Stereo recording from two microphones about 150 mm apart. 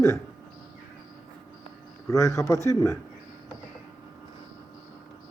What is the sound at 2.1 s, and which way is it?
Speech, 20° left (ahead or behind).